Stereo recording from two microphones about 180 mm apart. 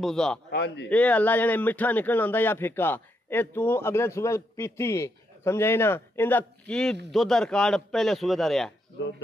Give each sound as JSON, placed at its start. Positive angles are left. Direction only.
{"t": 0.0, "sound": "a man's voice", "side_deg": 5}
{"t": 0.5, "sound": "a man's voice", "side_deg": 70}
{"t": 0.8, "sound": "a man's voice", "side_deg": 5}